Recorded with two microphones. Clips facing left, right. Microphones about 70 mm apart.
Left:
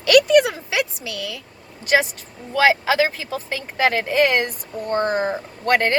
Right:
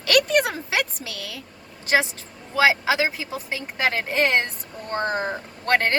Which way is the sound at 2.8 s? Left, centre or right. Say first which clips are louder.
Left 3 dB; centre.